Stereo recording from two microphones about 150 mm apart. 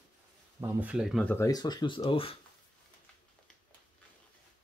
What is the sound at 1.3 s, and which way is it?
Speech, 20° left (ahead or behind).